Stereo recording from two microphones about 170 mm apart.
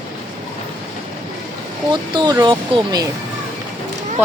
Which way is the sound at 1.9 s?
25° right (ahead or behind).